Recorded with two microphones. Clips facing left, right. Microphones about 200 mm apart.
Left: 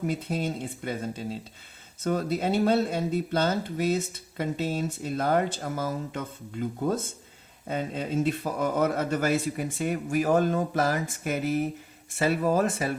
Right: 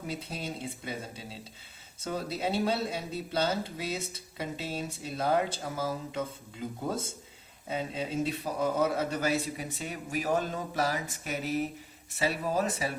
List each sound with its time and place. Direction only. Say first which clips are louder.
0.1 s speech: left 8 dB; 50° left (ahead or behind)